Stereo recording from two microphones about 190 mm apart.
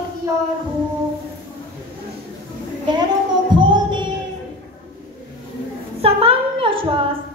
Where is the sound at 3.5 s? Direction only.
25° right (ahead or behind).